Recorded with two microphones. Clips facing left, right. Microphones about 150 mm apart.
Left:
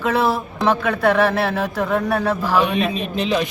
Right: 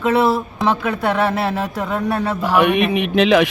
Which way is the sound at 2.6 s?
70° right (ahead or behind).